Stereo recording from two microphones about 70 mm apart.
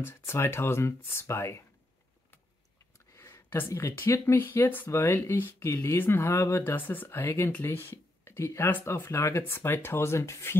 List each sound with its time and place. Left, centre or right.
0.0 s speech: left
3.4 s speech: left
5.6 s speech: left
6.6 s speech: left